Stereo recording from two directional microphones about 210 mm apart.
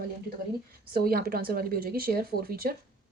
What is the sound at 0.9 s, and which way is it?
A woman's voice, 45° right (ahead or behind).